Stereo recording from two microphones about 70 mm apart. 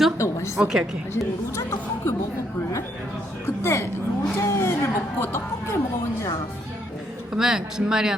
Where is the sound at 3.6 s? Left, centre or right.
Left.